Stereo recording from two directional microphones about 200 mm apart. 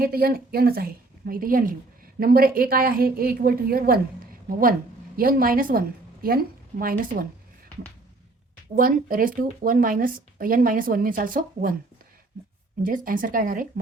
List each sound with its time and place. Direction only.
0.0 s speech: 50° right (ahead or behind)
5.1 s a woman's voice: 45° right (ahead or behind)
8.7 s speech: 45° right (ahead or behind)
12.8 s speech: 45° right (ahead or behind)